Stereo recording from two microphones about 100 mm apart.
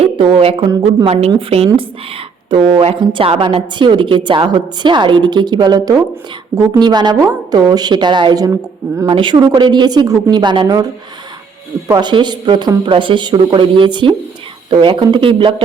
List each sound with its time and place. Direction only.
0.0 s speech: 65° right (ahead or behind)
1.0 s a woman's voice: 80° right; by 3.2 s 55° right (ahead or behind)
3.2 s a woman's voice: 65° right (ahead or behind); by 8.5 s 45° right (ahead or behind)
9.0 s a woman's voice: 55° right (ahead or behind)
11.9 s a woman's voice: 50° right (ahead or behind)